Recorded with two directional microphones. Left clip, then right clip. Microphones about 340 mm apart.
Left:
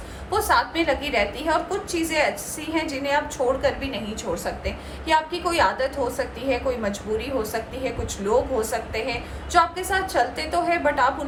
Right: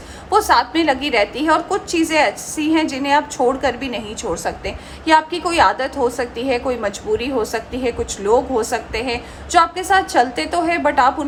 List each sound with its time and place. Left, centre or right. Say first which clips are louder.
0.3 s a woman's voice: right 7 dB; right